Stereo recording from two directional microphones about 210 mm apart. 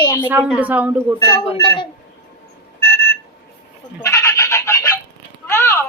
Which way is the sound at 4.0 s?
15° left (ahead or behind).